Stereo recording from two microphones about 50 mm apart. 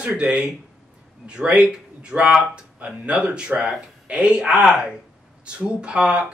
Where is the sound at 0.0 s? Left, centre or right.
Right.